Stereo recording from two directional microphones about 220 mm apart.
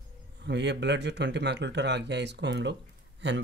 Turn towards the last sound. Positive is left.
turn(degrees=-55)  # may be behind; listen again after turning